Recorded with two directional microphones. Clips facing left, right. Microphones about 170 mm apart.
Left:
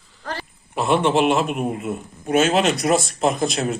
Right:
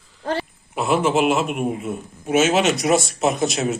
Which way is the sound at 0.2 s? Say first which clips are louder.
Right 7 dB; 25° right (ahead or behind).